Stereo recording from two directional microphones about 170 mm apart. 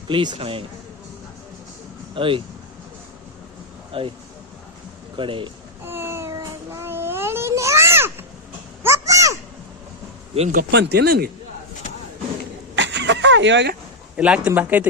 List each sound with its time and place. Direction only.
0.1 s a man's voice: 30° right (ahead or behind)
2.1 s a man's voice: 30° right (ahead or behind)
3.9 s a man's voice: 35° right (ahead or behind)
5.1 s speech: 30° right (ahead or behind)
5.8 s a sound: 15° right (ahead or behind)
10.5 s speech: 65° right (ahead or behind)
12.7 s a sound: 90° right
14.2 s speech: 5° right (ahead or behind)